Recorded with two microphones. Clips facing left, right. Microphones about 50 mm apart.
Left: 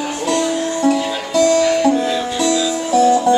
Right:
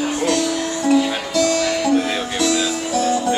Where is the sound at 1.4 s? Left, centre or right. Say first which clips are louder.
Left 6 dB; left.